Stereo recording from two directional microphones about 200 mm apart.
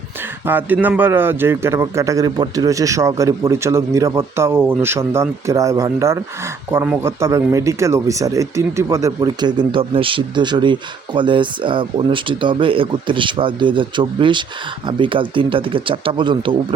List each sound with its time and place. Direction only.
0.4 s a man's voice: 10° right (ahead or behind)